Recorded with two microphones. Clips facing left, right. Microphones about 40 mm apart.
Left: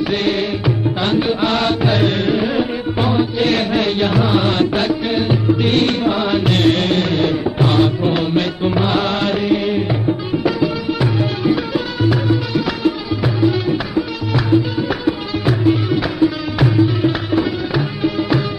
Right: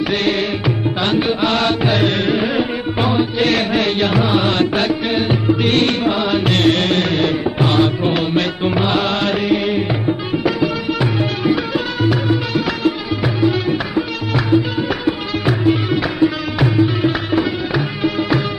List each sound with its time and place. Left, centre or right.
0.2 s music: right
10.4 s music of bollywood: right
12.3 s music: right